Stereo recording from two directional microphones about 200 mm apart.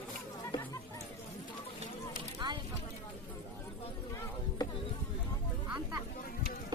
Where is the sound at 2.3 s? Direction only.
20° right (ahead or behind).